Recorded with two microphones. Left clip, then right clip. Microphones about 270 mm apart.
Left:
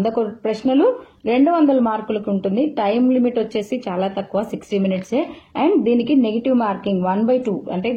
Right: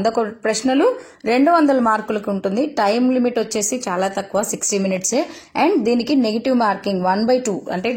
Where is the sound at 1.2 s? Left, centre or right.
Left.